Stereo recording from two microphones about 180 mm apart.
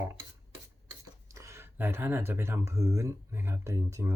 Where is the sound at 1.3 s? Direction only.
15° right (ahead or behind).